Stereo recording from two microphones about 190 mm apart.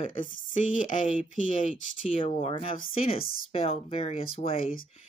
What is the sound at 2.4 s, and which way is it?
Speech, 30° left (ahead or behind).